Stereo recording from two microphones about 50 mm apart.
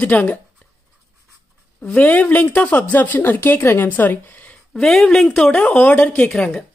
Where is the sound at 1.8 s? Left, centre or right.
Left.